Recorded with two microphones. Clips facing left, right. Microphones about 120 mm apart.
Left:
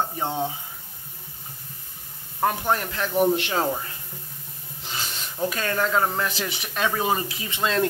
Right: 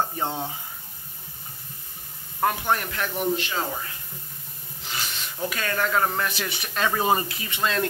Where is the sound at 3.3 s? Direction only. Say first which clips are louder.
Left 4 dB; 65° left (ahead or behind).